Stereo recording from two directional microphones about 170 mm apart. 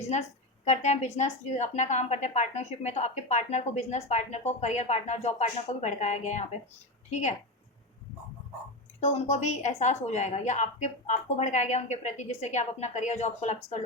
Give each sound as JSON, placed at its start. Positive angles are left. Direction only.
{"t": 0.0, "sound": "speech", "side_deg": 40}
{"t": 9.0, "sound": "speech", "side_deg": 40}